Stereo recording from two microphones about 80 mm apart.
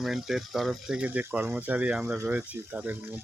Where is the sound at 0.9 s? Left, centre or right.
Centre.